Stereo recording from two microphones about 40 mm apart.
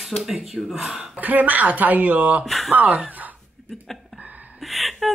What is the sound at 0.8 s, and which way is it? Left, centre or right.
Speech, right.